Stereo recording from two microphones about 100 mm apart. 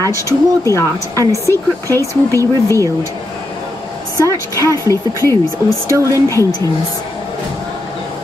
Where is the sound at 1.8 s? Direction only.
35° right (ahead or behind).